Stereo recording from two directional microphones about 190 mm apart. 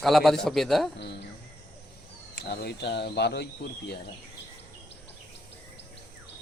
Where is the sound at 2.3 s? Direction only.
60° left (ahead or behind).